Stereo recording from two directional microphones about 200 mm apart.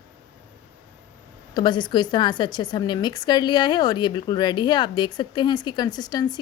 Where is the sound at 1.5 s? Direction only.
20° left (ahead or behind).